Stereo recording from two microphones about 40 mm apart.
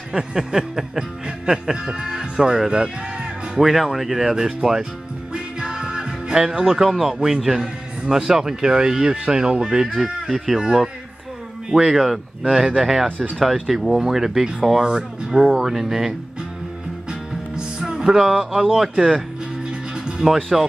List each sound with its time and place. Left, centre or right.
0.1 s speech: centre
5.3 s music: centre
6.8 s speech: centre
17.1 s music: right
18.1 s speech: centre